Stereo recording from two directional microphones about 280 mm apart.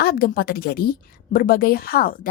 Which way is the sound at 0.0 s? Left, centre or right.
Left.